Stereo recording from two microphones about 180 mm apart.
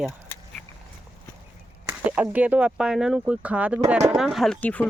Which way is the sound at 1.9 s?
10° right (ahead or behind).